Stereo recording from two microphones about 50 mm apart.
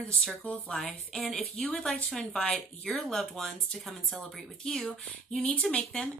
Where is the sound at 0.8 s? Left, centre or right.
Centre.